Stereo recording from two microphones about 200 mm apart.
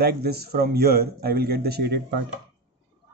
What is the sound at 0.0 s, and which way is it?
A man's voice, 50° right (ahead or behind).